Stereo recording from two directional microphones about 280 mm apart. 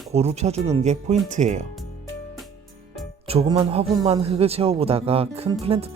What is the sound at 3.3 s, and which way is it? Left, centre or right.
Speech, centre.